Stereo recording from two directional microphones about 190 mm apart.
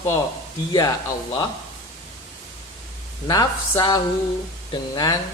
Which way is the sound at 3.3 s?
20° left (ahead or behind).